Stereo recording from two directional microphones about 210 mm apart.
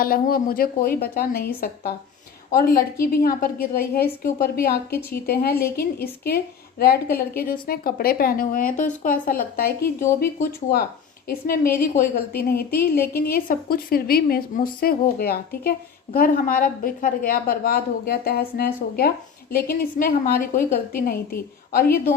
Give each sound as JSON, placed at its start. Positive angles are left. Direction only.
{"t": 0.0, "sound": "a woman's voice", "side_deg": 45}